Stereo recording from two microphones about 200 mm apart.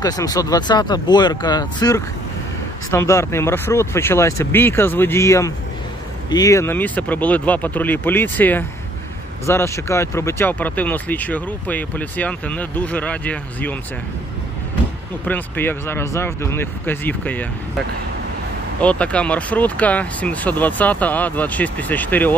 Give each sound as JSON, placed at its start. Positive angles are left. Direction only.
{"t": 0.0, "sound": "speech", "side_deg": 20}
{"t": 15.2, "sound": "speech", "side_deg": 10}
{"t": 18.8, "sound": "speech", "side_deg": 5}